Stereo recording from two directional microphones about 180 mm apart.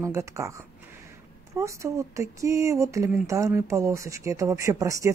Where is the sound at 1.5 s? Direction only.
15° right (ahead or behind).